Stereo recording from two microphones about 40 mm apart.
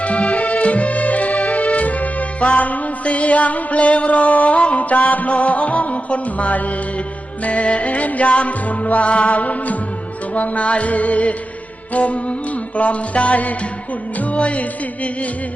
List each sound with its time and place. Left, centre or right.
0.0 s music: left